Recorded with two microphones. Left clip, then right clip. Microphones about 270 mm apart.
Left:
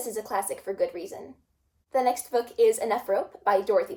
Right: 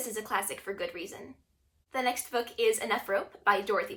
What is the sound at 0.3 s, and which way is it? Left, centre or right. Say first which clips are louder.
Speech: left 2 dB; right.